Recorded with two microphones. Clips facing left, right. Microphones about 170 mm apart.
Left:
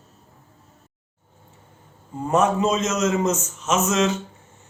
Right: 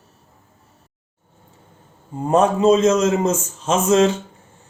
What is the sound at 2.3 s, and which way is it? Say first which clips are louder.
A man's voice: right 5 dB; 30° right (ahead or behind).